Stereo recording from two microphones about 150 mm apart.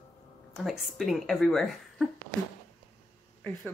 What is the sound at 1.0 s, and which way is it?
Speech, centre (ahead or behind).